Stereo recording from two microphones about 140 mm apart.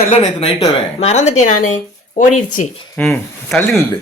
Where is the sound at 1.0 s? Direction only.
55° left (ahead or behind).